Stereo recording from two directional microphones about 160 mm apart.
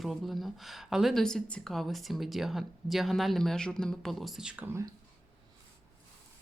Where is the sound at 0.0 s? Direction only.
Centre (ahead or behind).